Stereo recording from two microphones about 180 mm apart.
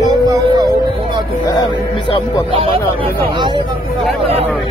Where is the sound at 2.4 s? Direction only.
30° right (ahead or behind).